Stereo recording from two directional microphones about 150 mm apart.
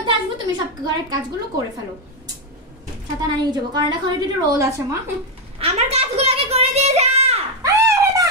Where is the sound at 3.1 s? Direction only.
30° right (ahead or behind).